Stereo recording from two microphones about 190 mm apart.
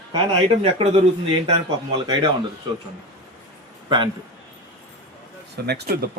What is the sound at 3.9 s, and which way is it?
Speech, 25° right (ahead or behind).